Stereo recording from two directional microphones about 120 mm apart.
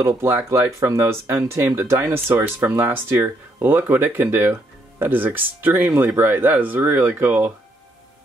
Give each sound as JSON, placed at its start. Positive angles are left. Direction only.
{"t": 0.0, "sound": "speech", "side_deg": -20}